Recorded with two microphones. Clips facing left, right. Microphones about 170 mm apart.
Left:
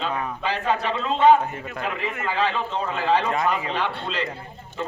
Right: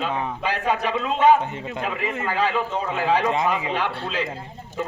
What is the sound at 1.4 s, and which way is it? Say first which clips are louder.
Speech: right 1 dB; 25° right (ahead or behind).